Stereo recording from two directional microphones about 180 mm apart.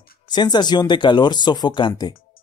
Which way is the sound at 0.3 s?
25° left (ahead or behind).